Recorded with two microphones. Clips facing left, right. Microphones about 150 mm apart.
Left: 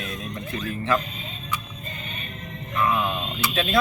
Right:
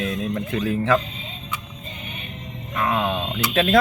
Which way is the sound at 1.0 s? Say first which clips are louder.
Right 1 dB; 20° right (ahead or behind).